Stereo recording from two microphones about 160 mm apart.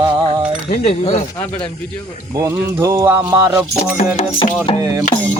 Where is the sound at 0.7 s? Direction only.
40° left (ahead or behind).